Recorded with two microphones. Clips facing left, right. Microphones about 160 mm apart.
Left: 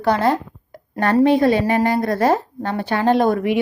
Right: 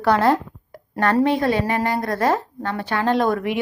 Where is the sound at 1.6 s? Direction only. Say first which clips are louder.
Left 4 dB; 30° left (ahead or behind).